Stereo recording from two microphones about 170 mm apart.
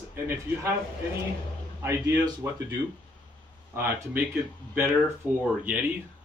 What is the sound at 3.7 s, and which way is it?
Speech, 15° right (ahead or behind).